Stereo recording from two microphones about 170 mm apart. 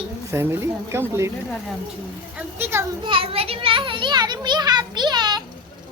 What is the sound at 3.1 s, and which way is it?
A child's voice, 35° right (ahead or behind).